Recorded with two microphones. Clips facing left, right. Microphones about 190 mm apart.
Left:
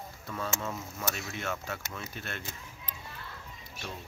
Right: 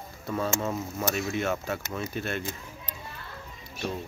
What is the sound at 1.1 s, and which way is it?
Speech, 10° right (ahead or behind).